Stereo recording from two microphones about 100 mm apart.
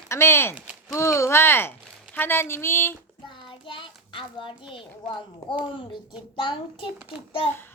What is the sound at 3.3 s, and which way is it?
Child singing, 55° left (ahead or behind).